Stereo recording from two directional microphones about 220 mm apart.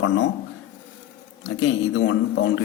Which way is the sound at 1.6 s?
55° left (ahead or behind).